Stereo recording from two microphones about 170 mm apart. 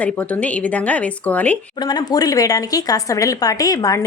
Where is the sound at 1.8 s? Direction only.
25° left (ahead or behind).